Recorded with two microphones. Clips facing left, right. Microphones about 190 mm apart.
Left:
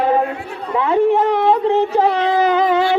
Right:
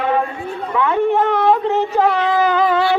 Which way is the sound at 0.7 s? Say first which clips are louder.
Left 2 dB; 30° left (ahead or behind).